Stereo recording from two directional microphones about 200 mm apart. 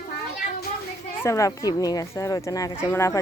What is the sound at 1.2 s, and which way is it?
Speech, 15° left (ahead or behind).